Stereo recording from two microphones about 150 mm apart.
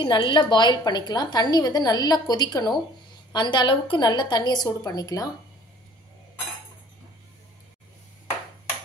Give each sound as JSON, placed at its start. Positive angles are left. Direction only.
{"t": 0.0, "sound": "a woman's voice", "side_deg": 30}